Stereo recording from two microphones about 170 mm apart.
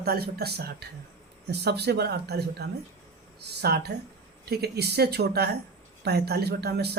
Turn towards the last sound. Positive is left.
turn(degrees=-70)  # may be behind; listen again after turning